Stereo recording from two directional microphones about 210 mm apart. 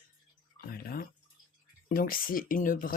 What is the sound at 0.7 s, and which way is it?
Speech, 45° left (ahead or behind).